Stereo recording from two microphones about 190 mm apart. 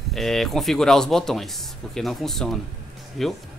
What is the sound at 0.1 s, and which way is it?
Speech, centre (ahead or behind).